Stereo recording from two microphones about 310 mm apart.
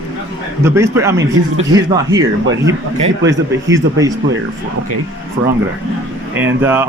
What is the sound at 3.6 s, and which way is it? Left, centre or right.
Speech, centre.